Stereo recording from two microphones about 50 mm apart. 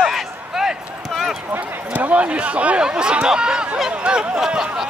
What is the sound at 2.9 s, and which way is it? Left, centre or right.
Speech, centre.